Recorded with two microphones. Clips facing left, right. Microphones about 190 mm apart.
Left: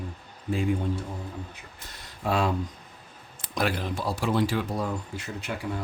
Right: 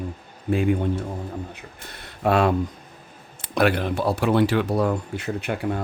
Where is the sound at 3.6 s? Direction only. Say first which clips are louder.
Right 7 dB; 65° right (ahead or behind).